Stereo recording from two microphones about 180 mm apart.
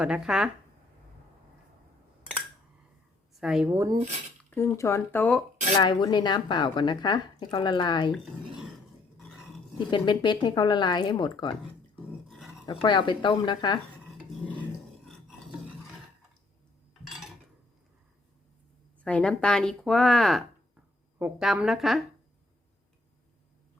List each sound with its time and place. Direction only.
0.0 s speech: 5° right (ahead or behind)
3.4 s speech: 5° right (ahead or behind)
4.4 s speech: 15° left (ahead or behind)
5.7 s a woman's voice: 25° left (ahead or behind)
9.7 s a woman's voice: 25° left (ahead or behind)
12.6 s a woman's voice: 25° left (ahead or behind)
19.0 s speech: 5° left (ahead or behind)